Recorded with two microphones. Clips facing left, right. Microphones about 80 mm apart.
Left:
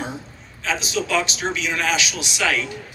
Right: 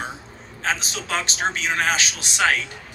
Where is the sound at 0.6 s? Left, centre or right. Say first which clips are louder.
Left 2 dB; right.